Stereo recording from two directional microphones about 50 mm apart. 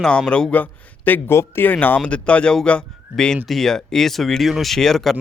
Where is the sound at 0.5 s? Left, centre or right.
Left.